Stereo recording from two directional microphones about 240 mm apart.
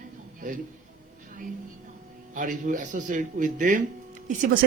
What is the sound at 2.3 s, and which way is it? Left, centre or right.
Speech, right.